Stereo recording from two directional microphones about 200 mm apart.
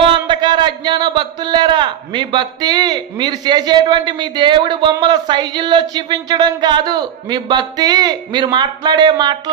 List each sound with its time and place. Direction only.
0.0 s a man's voice: 25° right (ahead or behind)